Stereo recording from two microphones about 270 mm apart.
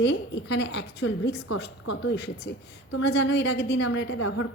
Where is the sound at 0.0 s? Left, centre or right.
Left.